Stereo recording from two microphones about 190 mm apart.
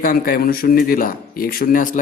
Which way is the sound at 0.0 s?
50° left (ahead or behind).